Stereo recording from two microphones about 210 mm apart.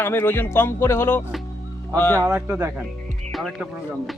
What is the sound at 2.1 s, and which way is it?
Speech, 10° right (ahead or behind).